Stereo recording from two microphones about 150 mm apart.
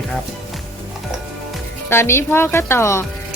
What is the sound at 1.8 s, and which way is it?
Speech, 15° left (ahead or behind).